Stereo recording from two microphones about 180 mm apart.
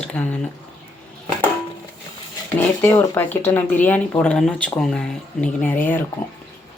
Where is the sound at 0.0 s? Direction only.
5° left (ahead or behind).